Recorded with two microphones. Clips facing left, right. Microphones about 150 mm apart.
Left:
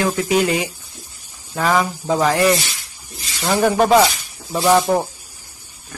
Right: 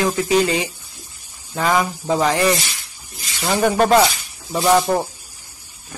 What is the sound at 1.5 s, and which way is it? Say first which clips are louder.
Speech: left 1 dB; centre (ahead or behind).